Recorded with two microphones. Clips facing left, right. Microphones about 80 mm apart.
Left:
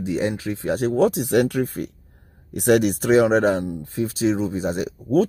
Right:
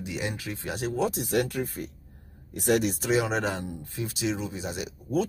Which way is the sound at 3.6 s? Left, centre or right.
Left.